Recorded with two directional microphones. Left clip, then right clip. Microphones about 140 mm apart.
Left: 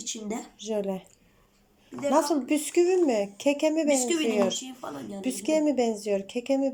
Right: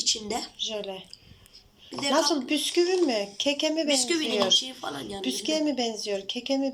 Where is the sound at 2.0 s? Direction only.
25° left (ahead or behind).